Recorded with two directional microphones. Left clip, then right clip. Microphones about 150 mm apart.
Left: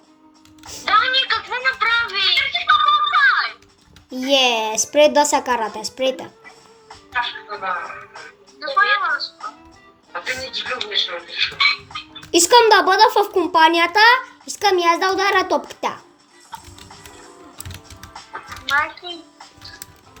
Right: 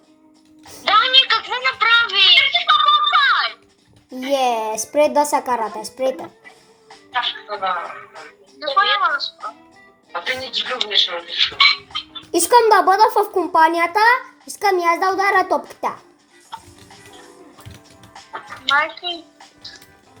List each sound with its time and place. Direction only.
0.9 s a sound: 15° right (ahead or behind)
4.1 s a child's voice: 20° left (ahead or behind)
7.1 s music: 15° right (ahead or behind)
10.1 s speech: 15° right (ahead or behind)
12.3 s a child's voice: 20° left (ahead or behind)
18.3 s a sound: 15° right (ahead or behind)